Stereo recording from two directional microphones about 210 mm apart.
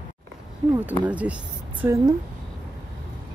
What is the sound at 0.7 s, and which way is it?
Speech, 5° right (ahead or behind).